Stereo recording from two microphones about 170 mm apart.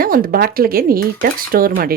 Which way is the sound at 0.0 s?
60° right (ahead or behind).